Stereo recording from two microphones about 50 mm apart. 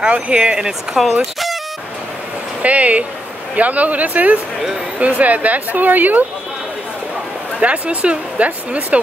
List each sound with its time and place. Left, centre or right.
0.0 s speech: right
2.6 s speech: right
7.6 s speech: right